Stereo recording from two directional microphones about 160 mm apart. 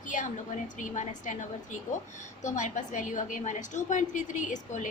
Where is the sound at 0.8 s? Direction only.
50° left (ahead or behind).